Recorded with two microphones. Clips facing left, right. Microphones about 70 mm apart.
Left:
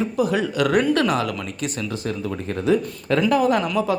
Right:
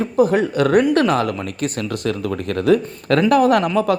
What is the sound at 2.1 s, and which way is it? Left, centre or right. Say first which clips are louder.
Speech: right 6 dB; right.